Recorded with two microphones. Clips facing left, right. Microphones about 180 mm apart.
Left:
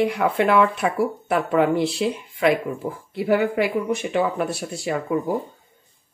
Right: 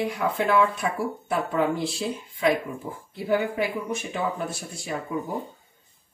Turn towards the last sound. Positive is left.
turn(degrees=75)  # may be behind; listen again after turning